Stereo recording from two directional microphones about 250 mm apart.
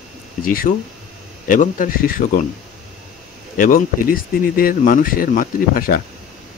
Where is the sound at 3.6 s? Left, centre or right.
Left.